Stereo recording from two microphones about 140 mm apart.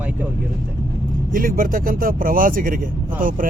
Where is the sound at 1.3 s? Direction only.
90° right.